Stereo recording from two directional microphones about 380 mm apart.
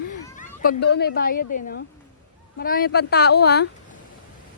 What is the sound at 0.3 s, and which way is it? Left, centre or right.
A woman's voice, left.